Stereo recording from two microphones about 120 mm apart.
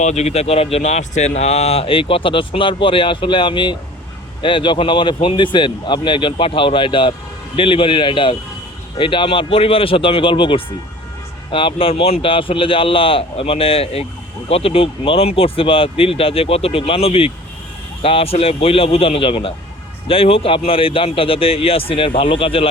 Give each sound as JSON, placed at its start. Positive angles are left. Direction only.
{"t": 0.0, "sound": "speech", "side_deg": 70}